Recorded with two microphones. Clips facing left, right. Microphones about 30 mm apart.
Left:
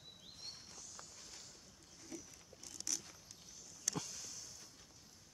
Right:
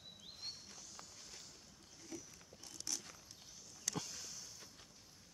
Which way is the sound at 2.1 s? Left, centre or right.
Centre.